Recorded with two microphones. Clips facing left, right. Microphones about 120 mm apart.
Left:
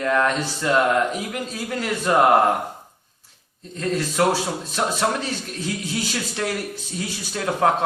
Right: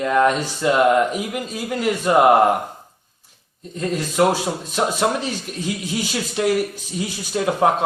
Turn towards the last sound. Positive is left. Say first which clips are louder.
# right 2 dB
turn(degrees=-15)  # may be behind; listen again after turning